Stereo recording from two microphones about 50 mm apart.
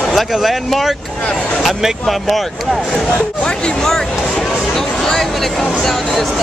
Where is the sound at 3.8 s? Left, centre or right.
Centre.